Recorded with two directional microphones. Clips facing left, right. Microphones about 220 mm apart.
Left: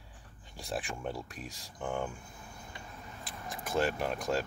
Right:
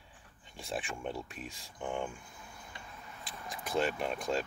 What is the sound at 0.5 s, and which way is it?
Speech, centre (ahead or behind).